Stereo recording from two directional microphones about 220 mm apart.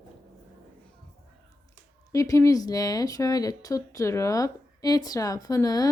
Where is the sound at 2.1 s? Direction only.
15° left (ahead or behind).